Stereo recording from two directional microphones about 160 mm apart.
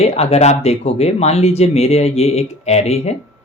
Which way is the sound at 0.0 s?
40° left (ahead or behind).